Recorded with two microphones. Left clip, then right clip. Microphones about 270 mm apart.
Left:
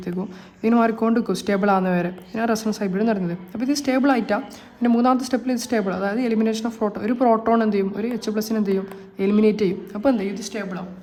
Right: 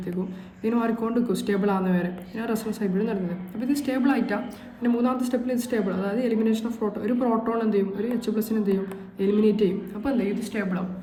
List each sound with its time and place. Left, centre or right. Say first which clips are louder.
0.6 s speech: left 7 dB; left